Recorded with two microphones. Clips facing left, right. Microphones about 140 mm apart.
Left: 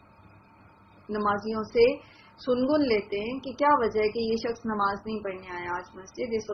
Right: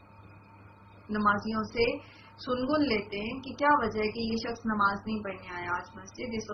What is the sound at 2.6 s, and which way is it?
A woman's voice, 55° left (ahead or behind).